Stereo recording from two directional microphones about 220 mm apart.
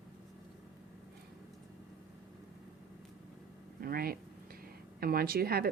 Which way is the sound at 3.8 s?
45° right (ahead or behind).